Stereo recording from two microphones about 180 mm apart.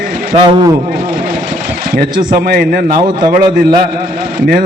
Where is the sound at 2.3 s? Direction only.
55° right (ahead or behind).